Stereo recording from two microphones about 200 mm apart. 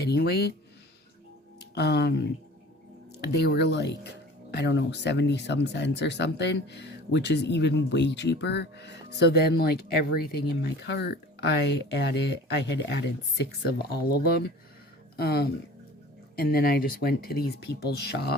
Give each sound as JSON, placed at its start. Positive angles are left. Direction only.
{"t": 0.0, "sound": "speech", "side_deg": 55}
{"t": 1.7, "sound": "speech", "side_deg": 55}
{"t": 3.4, "sound": "speech", "side_deg": 55}
{"t": 15.1, "sound": "speech", "side_deg": 50}